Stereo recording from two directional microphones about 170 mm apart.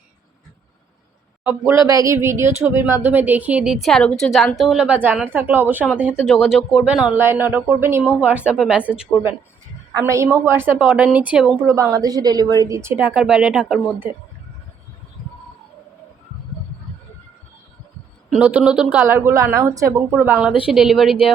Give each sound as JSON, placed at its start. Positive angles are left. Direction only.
{"t": 1.5, "sound": "speech", "side_deg": -15}
{"t": 10.0, "sound": "speech", "side_deg": -15}
{"t": 11.6, "sound": "a woman's voice", "side_deg": -20}
{"t": 18.3, "sound": "speech", "side_deg": -10}